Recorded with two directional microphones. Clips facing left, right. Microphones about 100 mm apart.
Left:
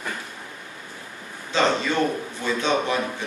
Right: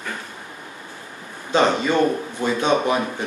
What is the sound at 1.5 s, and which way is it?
Speech, 15° right (ahead or behind).